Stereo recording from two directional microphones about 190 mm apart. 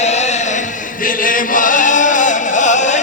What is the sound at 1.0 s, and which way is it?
Chant, 45° left (ahead or behind).